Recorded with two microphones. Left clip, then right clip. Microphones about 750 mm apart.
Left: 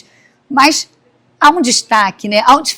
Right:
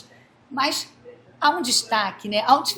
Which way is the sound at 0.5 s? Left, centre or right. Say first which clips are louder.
Left 14 dB; left.